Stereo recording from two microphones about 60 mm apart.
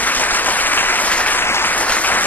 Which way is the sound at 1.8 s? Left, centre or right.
Left.